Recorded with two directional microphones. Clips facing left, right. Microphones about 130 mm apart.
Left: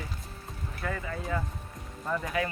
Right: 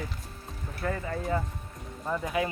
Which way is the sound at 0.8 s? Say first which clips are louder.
Right 3 dB; 35° right (ahead or behind).